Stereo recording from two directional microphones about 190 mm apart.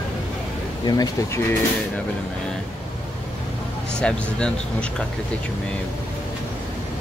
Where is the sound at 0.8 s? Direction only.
20° left (ahead or behind).